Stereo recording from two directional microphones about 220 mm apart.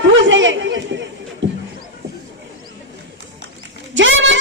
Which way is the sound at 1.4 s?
55° right (ahead or behind).